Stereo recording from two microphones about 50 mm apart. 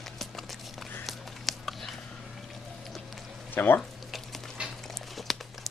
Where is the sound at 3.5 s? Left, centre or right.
Left.